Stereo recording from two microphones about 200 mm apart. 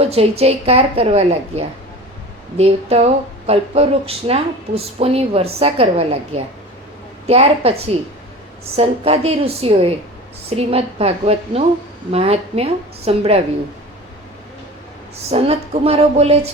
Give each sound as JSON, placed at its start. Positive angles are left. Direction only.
{"t": 0.0, "sound": "a woman's voice", "side_deg": -30}
{"t": 8.7, "sound": "a woman's voice", "side_deg": -30}
{"t": 15.3, "sound": "speech", "side_deg": -30}